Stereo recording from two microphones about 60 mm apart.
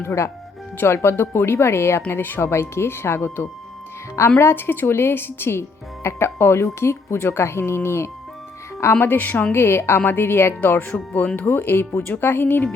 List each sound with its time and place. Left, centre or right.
0.0 s speech: left